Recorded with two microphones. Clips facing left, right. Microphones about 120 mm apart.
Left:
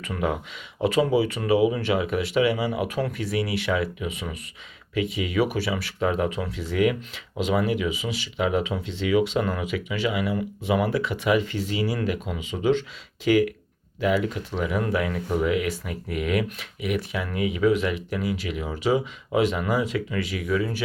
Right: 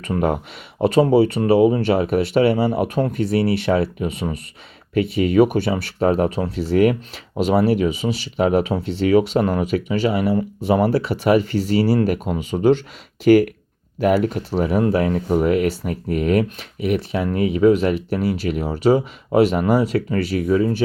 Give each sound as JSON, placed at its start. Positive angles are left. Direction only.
{"t": 0.1, "sound": "speech", "side_deg": -45}
{"t": 1.1, "sound": "speech", "side_deg": -55}
{"t": 2.0, "sound": "speech", "side_deg": -55}
{"t": 3.0, "sound": "speech", "side_deg": -30}
{"t": 5.7, "sound": "speech", "side_deg": -40}
{"t": 15.4, "sound": "speech", "side_deg": -50}
{"t": 15.6, "sound": "speech", "side_deg": -30}
{"t": 15.9, "sound": "speech", "side_deg": -45}
{"t": 18.3, "sound": "speech", "side_deg": -45}
{"t": 18.6, "sound": "speech", "side_deg": -35}